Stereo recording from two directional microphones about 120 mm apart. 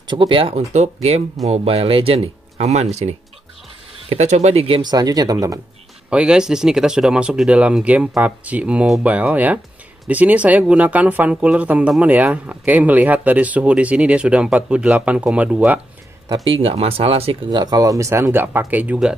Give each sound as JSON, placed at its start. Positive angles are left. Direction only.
{"t": 0.1, "sound": "speech", "side_deg": -45}
{"t": 0.6, "sound": "speech", "side_deg": -65}
{"t": 4.8, "sound": "speech", "side_deg": -35}
{"t": 6.0, "sound": "speech", "side_deg": -5}
{"t": 16.6, "sound": "speech", "side_deg": -55}
{"t": 17.5, "sound": "speech", "side_deg": -35}